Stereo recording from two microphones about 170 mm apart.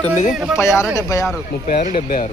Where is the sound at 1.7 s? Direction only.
50° left (ahead or behind).